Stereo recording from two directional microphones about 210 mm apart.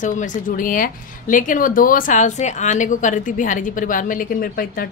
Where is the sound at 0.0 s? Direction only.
35° left (ahead or behind).